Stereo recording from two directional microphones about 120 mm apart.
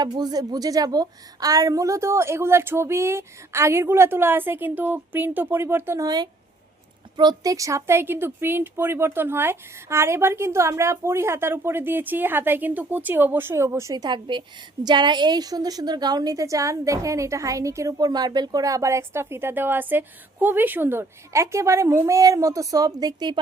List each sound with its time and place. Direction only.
0.0 s a woman's voice: 35° right (ahead or behind); by 6.1 s 20° right (ahead or behind)
7.2 s a woman's voice: 35° right (ahead or behind)